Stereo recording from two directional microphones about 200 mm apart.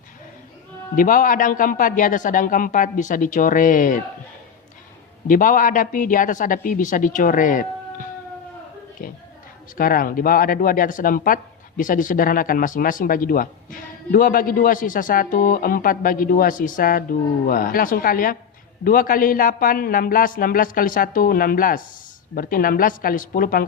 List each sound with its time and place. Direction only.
0.9 s a man's voice: 40° left (ahead or behind)
5.3 s a man's voice: 40° left (ahead or behind)